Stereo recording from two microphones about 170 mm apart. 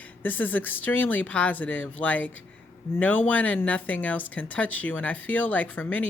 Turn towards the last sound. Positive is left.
turn(degrees=10)  # may be behind; listen again after turning